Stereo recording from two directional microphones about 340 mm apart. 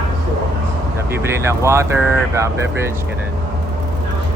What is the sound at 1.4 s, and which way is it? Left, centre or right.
Speech, centre.